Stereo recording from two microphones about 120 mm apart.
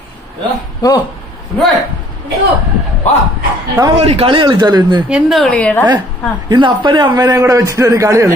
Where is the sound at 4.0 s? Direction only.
55° right (ahead or behind); by 5.0 s 35° right (ahead or behind).